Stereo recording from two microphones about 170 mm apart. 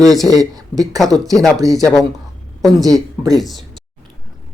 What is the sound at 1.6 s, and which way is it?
Speech, 20° right (ahead or behind).